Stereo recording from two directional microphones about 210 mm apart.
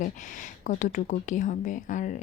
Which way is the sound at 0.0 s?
35° left (ahead or behind).